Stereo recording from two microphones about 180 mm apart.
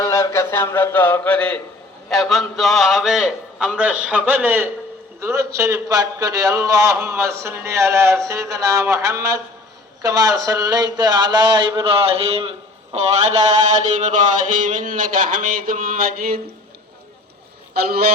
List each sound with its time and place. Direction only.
0.0 s a sound: 15° left (ahead or behind)
2.0 s a man's voice: centre (ahead or behind); by 16.4 s 55° right (ahead or behind)
17.7 s a man's voice: 60° right (ahead or behind)